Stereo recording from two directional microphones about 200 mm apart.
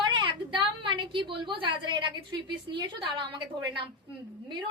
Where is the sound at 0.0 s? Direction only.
25° right (ahead or behind).